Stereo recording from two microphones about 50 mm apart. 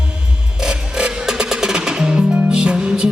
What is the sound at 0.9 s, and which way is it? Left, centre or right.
Music, centre.